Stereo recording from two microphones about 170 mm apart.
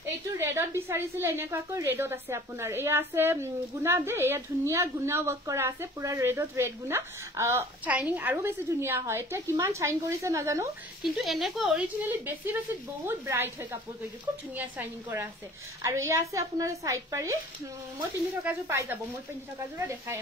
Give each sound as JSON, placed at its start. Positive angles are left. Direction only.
{"t": 0.0, "sound": "a woman's voice", "side_deg": -15}
{"t": 11.0, "sound": "a woman's voice", "side_deg": 0}
{"t": 18.4, "sound": "a woman's voice", "side_deg": -10}